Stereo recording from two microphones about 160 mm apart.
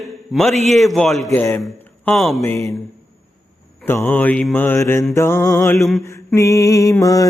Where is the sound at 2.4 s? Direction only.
20° left (ahead or behind).